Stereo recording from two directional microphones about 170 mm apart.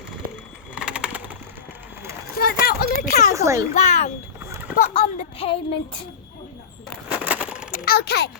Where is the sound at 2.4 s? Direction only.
60° left (ahead or behind).